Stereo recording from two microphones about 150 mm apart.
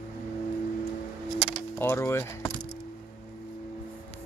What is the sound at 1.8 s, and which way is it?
Speech, 15° left (ahead or behind).